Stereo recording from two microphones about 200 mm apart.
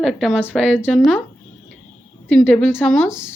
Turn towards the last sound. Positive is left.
turn(degrees=10)  # may be behind; listen again after turning